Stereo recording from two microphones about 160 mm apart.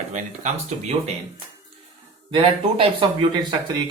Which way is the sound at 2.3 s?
35° right (ahead or behind).